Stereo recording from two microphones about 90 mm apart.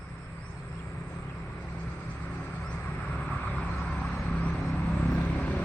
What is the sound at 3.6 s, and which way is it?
Vehicle, 15° left (ahead or behind).